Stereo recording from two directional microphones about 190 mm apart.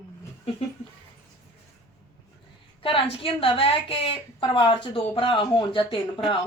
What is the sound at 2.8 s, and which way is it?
A woman's voice, 30° left (ahead or behind).